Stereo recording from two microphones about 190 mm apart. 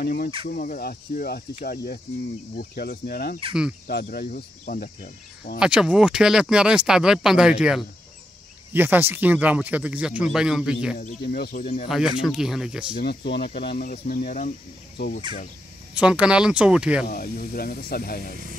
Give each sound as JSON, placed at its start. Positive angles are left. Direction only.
{"t": 0.0, "sound": "speech", "side_deg": 55}
{"t": 2.6, "sound": "cricket", "side_deg": 50}
{"t": 4.1, "sound": "speech", "side_deg": 50}
{"t": 5.6, "sound": "speech", "side_deg": -5}
{"t": 11.0, "sound": "speech", "side_deg": 50}
{"t": 11.6, "sound": "speech", "side_deg": 30}
{"t": 12.2, "sound": "speech", "side_deg": -5}
{"t": 12.9, "sound": "speech", "side_deg": 55}
{"t": 15.0, "sound": "cricket", "side_deg": 60}
{"t": 15.9, "sound": "speech", "side_deg": -5}
{"t": 17.1, "sound": "speech", "side_deg": 50}